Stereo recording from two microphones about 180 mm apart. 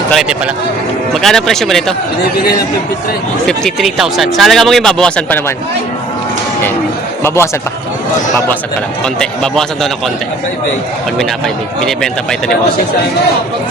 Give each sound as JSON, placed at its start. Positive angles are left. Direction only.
{"t": 0.1, "sound": "a man's voice", "side_deg": -5}
{"t": 3.4, "sound": "speech", "side_deg": 0}
{"t": 7.2, "sound": "speech", "side_deg": 15}
{"t": 9.1, "sound": "speech", "side_deg": 5}
{"t": 11.2, "sound": "speech", "side_deg": 0}